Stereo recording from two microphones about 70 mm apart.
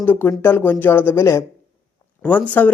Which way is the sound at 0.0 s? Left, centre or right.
Left.